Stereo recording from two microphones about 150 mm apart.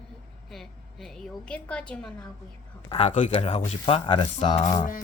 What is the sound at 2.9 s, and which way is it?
Speech, 45° left (ahead or behind).